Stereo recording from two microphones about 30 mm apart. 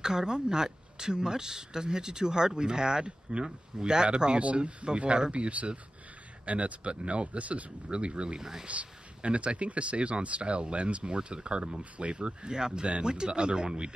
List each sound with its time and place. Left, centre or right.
0.0 s speech: right
5.3 s speech: right
7.9 s speech: right
8.4 s speech: centre
8.6 s speech: right
12.5 s speech: right